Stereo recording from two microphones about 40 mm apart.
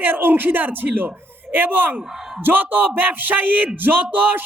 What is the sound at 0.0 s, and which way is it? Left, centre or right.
Speech, right.